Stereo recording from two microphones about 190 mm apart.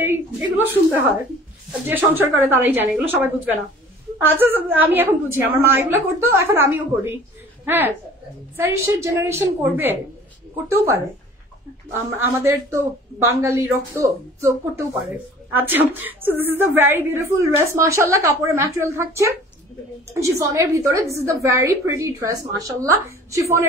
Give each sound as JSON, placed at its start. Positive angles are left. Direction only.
{"t": 0.0, "sound": "a woman's voice", "side_deg": -10}
{"t": 11.9, "sound": "a woman's voice", "side_deg": -15}
{"t": 15.5, "sound": "a woman's voice", "side_deg": -10}